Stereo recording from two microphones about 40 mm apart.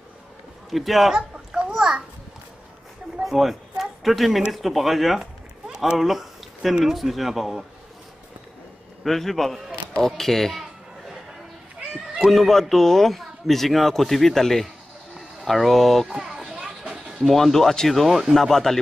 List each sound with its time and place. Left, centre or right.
0.7 s a man's voice: centre
1.1 s a sound: centre
3.3 s speech: centre
5.9 s a sound: centre
6.8 s a man's voice: centre
9.0 s a man's voice: centre
12.3 s a man's voice: centre
16.1 s children playing: centre
17.2 s speech: centre